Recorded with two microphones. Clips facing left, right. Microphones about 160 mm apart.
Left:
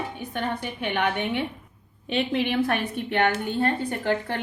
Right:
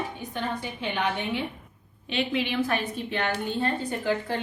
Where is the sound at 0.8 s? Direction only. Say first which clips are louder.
Left 3 dB; 60° left (ahead or behind).